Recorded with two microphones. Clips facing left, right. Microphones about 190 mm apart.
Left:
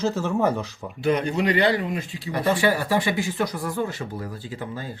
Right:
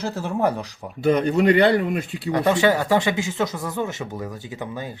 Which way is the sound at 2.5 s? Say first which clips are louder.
Right 2 dB; 20° right (ahead or behind).